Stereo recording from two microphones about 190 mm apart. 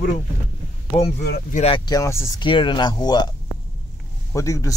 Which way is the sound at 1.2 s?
55° left (ahead or behind).